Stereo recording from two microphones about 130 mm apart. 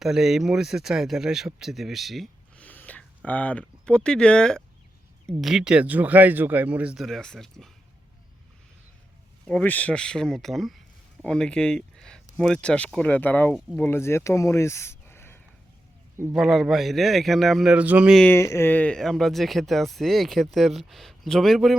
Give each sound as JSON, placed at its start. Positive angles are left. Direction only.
{"t": 0.0, "sound": "speech", "side_deg": -5}
{"t": 2.6, "sound": "a sound", "side_deg": 10}
{"t": 3.2, "sound": "speech", "side_deg": 10}
{"t": 9.5, "sound": "speech", "side_deg": 10}
{"t": 16.3, "sound": "speech", "side_deg": 0}
{"t": 18.3, "sound": "speech", "side_deg": 20}